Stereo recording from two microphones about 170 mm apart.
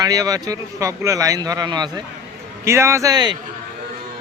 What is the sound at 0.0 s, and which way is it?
A man's voice, 20° right (ahead or behind).